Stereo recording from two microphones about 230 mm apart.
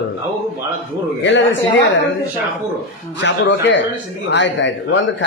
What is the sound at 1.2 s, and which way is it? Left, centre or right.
Speech, left.